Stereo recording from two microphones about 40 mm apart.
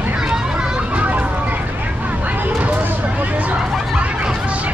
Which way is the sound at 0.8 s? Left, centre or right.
Right.